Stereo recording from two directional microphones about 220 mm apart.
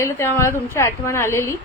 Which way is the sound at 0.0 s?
10° left (ahead or behind).